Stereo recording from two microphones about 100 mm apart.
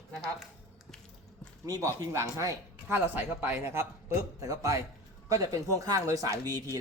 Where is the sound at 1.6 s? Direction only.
35° right (ahead or behind).